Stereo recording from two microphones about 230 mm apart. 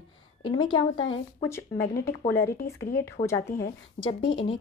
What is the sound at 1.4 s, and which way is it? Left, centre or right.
Speech, centre.